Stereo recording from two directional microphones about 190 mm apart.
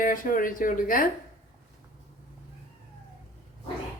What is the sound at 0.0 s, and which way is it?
A woman's voice, 45° left (ahead or behind).